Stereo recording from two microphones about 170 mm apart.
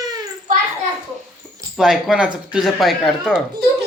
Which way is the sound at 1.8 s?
5° right (ahead or behind).